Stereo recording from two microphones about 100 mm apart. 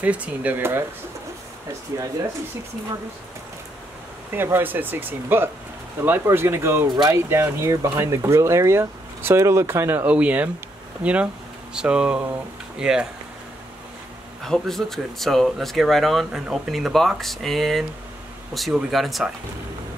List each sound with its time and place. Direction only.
0.0 s speech: 15° right (ahead or behind)
1.9 s speech: 30° right (ahead or behind)
4.3 s speech: 20° right (ahead or behind)
14.4 s speech: 5° left (ahead or behind)